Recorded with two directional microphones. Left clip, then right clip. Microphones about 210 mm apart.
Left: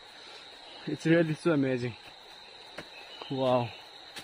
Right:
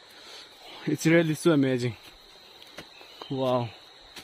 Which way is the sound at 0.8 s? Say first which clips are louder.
Right 3 dB; 35° right (ahead or behind).